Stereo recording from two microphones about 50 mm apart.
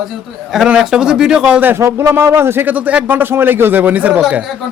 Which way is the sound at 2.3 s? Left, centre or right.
Right.